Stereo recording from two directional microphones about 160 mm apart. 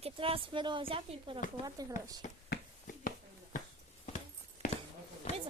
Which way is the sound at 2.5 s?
60° left (ahead or behind).